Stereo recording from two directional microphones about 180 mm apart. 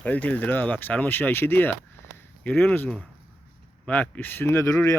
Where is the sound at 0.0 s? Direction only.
5° left (ahead or behind).